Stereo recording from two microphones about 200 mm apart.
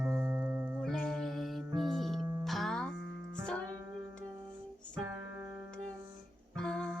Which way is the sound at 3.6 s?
20° right (ahead or behind).